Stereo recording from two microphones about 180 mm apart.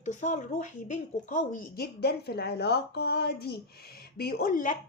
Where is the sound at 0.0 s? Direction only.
40° left (ahead or behind).